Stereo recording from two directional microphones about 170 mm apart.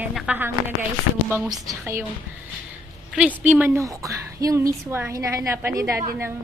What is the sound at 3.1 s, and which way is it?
A woman's voice, 5° right (ahead or behind).